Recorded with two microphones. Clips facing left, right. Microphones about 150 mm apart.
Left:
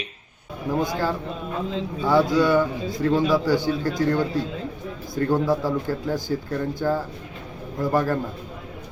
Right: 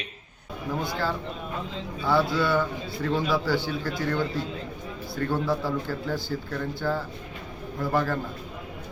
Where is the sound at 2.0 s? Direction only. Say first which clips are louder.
Left 5 dB; 15° left (ahead or behind).